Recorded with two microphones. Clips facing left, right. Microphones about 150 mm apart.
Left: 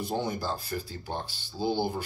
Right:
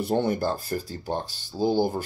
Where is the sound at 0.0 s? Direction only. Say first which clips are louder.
Right 7 dB; 60° right (ahead or behind).